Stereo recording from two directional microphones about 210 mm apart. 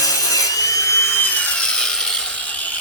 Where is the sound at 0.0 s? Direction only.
15° left (ahead or behind).